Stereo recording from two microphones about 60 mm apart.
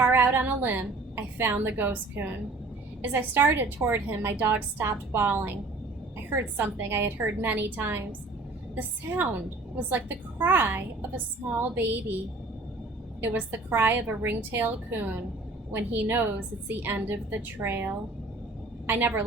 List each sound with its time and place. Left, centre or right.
0.0 s a woman's voice: right
13.2 s a woman's voice: right